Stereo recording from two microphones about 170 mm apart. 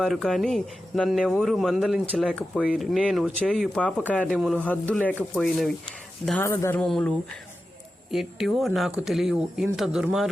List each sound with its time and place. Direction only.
0.0 s speech: centre (ahead or behind)
6.8 s speech: centre (ahead or behind)
8.1 s speech: centre (ahead or behind)